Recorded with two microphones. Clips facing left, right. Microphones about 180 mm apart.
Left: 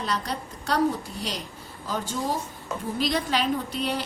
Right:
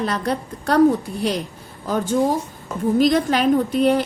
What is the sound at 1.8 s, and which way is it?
A woman's voice, 50° right (ahead or behind).